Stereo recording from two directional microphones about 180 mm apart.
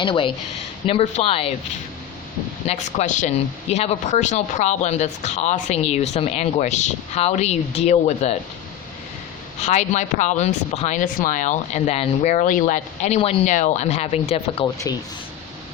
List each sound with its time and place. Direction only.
0.0 s a woman's voice: 30° left (ahead or behind)
2.6 s a woman's voice: 40° left (ahead or behind)
9.6 s a woman's voice: 40° left (ahead or behind)